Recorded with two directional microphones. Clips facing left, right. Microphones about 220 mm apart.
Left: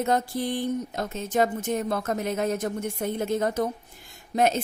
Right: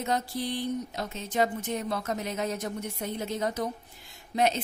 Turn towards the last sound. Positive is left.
turn(degrees=50)  # may be behind; listen again after turning